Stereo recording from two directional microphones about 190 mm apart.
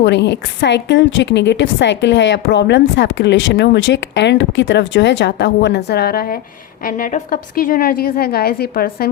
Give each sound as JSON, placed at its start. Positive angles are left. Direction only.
{"t": 0.0, "sound": "a woman's voice", "side_deg": 65}